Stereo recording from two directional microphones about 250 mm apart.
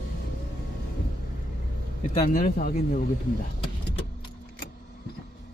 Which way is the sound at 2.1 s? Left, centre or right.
Left.